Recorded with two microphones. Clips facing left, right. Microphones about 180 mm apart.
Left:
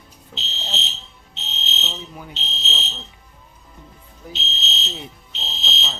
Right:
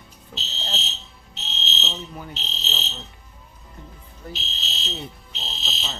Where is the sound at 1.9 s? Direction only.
5° left (ahead or behind).